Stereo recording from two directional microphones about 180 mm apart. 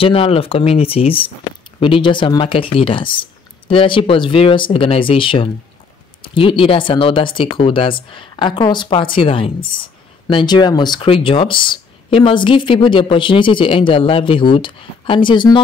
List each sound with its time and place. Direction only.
0.0 s speech: 30° left (ahead or behind)